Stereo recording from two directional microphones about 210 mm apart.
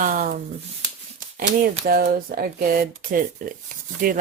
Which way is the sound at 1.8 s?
45° right (ahead or behind).